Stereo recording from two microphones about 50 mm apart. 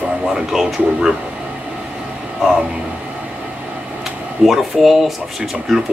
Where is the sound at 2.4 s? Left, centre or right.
Centre.